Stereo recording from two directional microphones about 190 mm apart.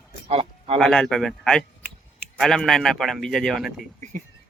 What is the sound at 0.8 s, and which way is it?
Speech, 5° left (ahead or behind).